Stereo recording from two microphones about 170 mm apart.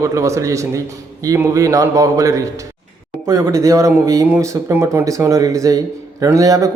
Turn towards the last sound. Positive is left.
turn(degrees=-20)  # may be behind; listen again after turning